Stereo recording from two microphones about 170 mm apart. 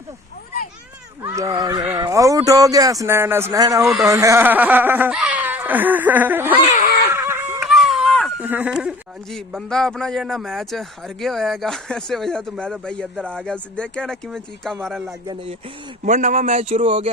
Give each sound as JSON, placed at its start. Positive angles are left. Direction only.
{"t": 1.2, "sound": "speech", "side_deg": -20}
{"t": 6.7, "sound": "screaming", "side_deg": 55}
{"t": 7.1, "sound": "laughter", "side_deg": -15}
{"t": 7.6, "sound": "a sound", "side_deg": 0}
{"t": 8.4, "sound": "a man's voice", "side_deg": -10}
{"t": 16.0, "sound": "speech", "side_deg": -45}